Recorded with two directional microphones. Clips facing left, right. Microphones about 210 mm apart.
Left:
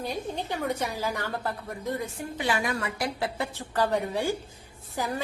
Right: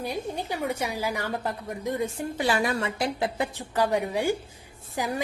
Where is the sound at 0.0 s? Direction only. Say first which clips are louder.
Right 1 dB; 10° right (ahead or behind).